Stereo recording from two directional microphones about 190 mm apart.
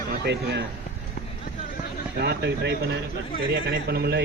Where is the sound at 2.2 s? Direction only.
60° right (ahead or behind).